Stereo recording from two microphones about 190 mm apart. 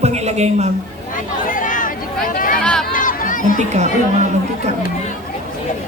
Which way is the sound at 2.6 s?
5° left (ahead or behind).